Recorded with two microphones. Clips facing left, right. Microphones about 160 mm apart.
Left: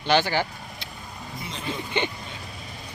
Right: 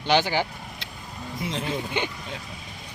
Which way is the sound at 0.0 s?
15° right (ahead or behind).